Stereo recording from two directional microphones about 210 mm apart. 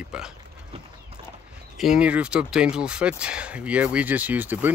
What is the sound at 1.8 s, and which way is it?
Speech, 5° right (ahead or behind).